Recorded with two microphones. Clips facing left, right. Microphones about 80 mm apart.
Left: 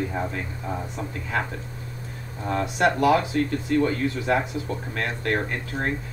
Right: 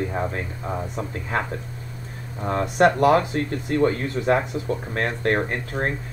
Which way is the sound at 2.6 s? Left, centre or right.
Right.